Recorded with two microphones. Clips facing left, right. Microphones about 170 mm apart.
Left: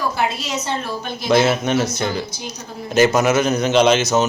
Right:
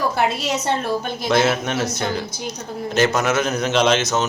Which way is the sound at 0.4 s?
60° right (ahead or behind).